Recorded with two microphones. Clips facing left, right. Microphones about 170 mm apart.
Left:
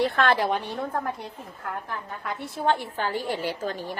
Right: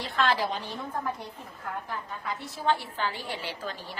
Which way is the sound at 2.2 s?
55° left (ahead or behind).